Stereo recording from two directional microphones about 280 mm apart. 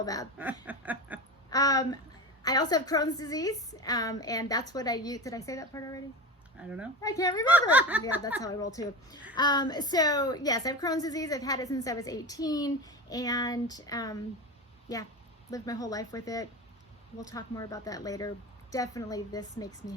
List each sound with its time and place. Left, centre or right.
0.0 s a woman's voice: centre
0.6 s snicker: centre
1.5 s a woman's voice: centre
6.6 s snicker: centre
7.0 s a woman's voice: centre
7.7 s snicker: centre
8.4 s a woman's voice: centre
15.4 s a woman's voice: centre